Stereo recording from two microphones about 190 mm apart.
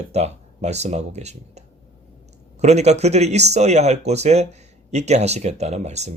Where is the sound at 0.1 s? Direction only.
35° right (ahead or behind).